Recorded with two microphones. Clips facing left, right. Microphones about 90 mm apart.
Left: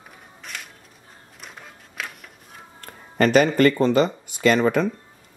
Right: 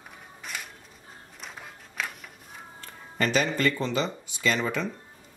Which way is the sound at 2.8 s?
50° left (ahead or behind).